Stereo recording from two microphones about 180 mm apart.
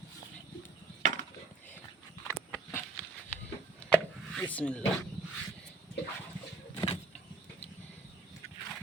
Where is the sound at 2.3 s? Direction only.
15° left (ahead or behind).